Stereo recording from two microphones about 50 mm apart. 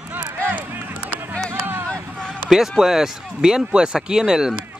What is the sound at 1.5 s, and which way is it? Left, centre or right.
Vehicle, right.